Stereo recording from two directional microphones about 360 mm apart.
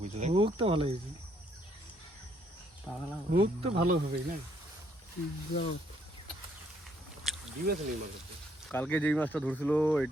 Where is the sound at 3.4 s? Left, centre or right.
Centre.